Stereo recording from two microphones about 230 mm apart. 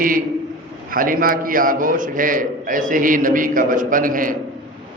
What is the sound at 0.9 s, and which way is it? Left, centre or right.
A man's voice, right.